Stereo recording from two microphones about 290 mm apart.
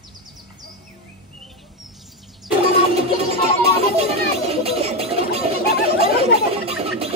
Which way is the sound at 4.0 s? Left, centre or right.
Right.